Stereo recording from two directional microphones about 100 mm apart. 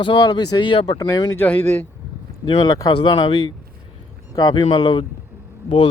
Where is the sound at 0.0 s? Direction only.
50° left (ahead or behind).